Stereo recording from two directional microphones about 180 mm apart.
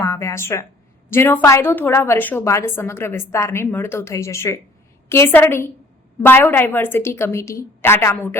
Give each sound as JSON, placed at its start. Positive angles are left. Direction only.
{"t": 0.0, "sound": "a woman's voice", "side_deg": 15}